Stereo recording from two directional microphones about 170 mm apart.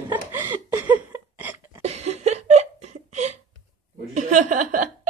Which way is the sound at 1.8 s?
40° right (ahead or behind).